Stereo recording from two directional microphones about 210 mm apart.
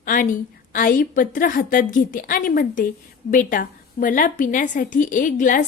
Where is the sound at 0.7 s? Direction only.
40° left (ahead or behind).